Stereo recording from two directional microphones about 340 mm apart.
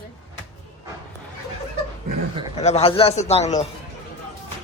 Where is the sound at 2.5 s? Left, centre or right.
Centre.